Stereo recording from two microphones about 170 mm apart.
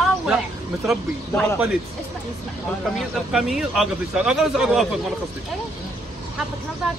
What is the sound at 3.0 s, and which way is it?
A man's voice, centre (ahead or behind).